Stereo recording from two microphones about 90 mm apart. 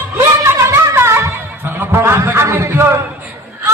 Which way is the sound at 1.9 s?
30° right (ahead or behind).